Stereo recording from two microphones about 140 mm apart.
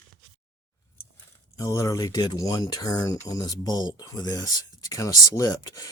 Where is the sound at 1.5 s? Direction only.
25° left (ahead or behind).